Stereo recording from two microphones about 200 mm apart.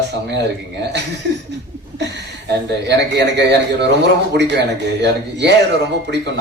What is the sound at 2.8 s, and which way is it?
A man's voice, 60° right (ahead or behind).